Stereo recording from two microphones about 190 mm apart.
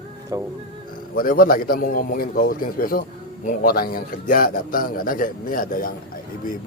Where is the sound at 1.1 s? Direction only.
50° left (ahead or behind).